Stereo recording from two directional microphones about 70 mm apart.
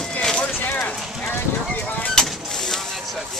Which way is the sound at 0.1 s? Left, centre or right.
Centre.